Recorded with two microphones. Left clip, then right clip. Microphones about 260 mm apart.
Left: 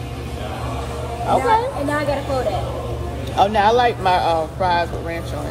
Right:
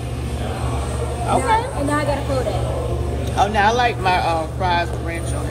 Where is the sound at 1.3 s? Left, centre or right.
Left.